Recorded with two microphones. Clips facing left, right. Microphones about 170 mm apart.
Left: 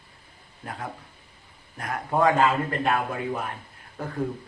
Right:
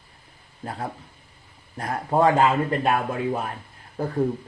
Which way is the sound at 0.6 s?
30° right (ahead or behind).